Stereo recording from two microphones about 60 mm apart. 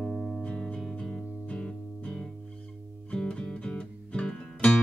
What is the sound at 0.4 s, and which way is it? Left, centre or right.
Music, left.